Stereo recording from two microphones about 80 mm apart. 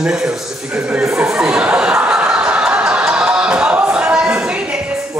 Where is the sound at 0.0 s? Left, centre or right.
Centre.